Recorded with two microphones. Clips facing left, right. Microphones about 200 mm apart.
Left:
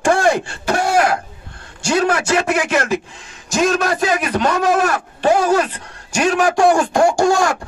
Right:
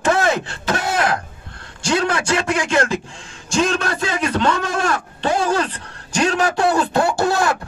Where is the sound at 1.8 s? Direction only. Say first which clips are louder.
Left 3 dB; 10° left (ahead or behind).